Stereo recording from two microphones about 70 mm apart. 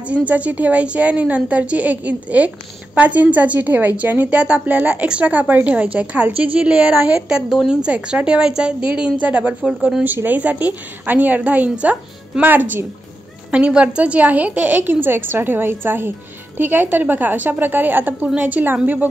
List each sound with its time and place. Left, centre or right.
0.1 s a woman's voice: centre
9.7 s a woman's voice: centre
10.0 s a woman's voice: right